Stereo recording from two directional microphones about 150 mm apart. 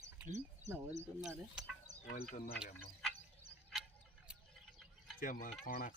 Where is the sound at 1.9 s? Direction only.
55° right (ahead or behind).